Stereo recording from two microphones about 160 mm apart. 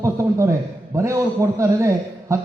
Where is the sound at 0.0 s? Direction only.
20° right (ahead or behind).